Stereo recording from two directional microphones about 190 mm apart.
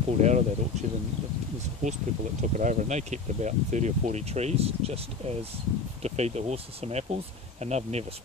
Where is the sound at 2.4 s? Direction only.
40° right (ahead or behind).